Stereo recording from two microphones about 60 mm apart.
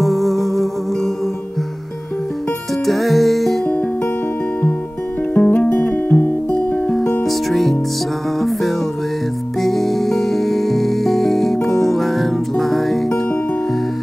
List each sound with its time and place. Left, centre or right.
0.0 s music: centre
2.8 s music: centre
3.6 s music: left
5.3 s music: left
7.2 s music: centre